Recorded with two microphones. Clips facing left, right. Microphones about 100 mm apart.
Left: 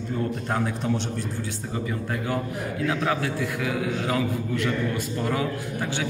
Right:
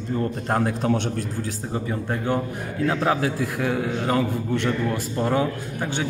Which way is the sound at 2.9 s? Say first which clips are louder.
Right 4 dB; 40° right (ahead or behind).